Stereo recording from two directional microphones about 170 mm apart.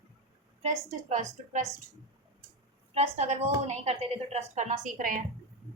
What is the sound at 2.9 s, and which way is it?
A woman's voice, 40° right (ahead or behind).